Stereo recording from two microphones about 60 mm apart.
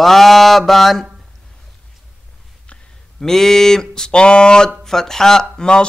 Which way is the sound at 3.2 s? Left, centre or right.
Centre.